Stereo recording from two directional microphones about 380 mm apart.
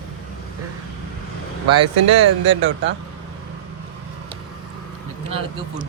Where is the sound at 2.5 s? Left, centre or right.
Right.